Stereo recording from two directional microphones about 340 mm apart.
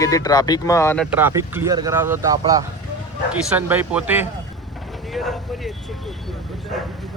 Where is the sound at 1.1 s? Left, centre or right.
Centre.